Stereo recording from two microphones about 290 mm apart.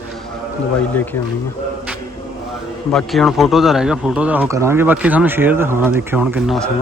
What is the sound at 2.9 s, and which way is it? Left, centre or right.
Speech, centre.